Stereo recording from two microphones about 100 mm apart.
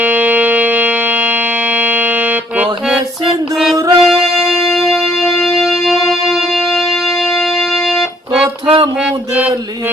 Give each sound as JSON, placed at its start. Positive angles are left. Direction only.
{"t": 0.0, "sound": "music", "side_deg": -15}
{"t": 3.2, "sound": "music", "side_deg": 0}
{"t": 8.6, "sound": "a sound", "side_deg": -60}